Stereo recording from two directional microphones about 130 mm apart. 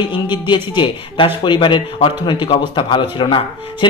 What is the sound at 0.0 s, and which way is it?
A man's voice, 35° left (ahead or behind).